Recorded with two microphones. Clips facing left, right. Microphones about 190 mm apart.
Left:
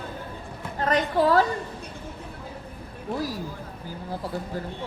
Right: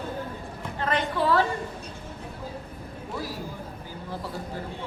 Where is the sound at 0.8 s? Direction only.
40° left (ahead or behind).